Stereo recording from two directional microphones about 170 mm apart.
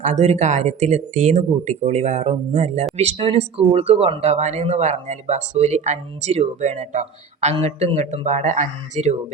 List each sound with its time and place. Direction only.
0.0 s speech: 40° right (ahead or behind)